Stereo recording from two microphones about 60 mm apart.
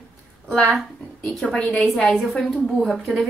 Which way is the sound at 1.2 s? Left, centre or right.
Centre.